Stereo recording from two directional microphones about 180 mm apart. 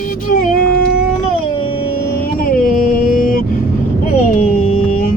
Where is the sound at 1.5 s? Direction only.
30° left (ahead or behind).